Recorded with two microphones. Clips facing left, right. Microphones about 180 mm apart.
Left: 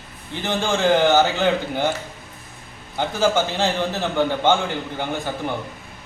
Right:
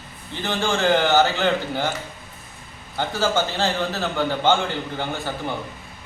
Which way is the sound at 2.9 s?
15° left (ahead or behind).